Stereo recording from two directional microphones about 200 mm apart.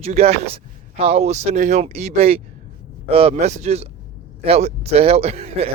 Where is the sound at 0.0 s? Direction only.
30° right (ahead or behind).